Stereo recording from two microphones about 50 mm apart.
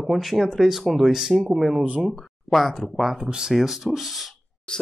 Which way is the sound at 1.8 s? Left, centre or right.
Right.